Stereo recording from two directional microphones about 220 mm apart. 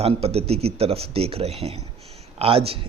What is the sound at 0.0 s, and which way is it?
Speech, 25° right (ahead or behind).